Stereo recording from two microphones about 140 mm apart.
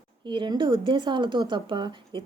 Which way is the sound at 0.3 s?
35° right (ahead or behind).